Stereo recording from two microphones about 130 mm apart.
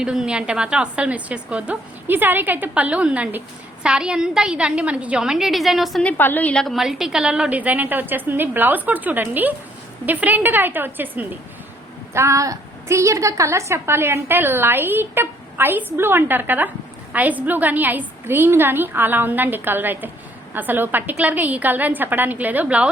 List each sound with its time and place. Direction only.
0.0 s a woman's voice: 5° right (ahead or behind)
6.1 s a woman's voice: 15° left (ahead or behind); by 22.9 s 10° right (ahead or behind)